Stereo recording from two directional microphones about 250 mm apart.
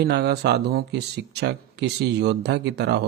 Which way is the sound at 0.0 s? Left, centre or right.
Right.